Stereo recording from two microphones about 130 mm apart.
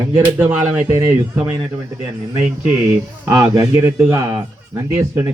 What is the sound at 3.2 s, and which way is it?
Speech, 25° right (ahead or behind).